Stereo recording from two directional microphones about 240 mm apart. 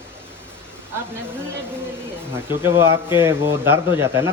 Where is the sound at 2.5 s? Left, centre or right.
Centre.